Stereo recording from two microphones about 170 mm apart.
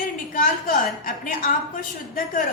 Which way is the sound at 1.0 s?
55° left (ahead or behind).